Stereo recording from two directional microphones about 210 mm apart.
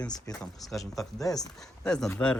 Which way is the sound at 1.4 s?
Centre (ahead or behind).